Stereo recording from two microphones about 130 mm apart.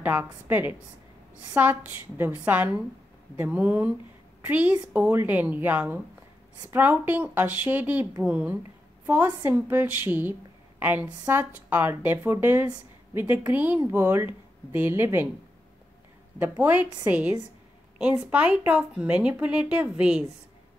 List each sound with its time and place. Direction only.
0.0 s a woman's voice: 15° right (ahead or behind)
16.3 s speech: 15° right (ahead or behind)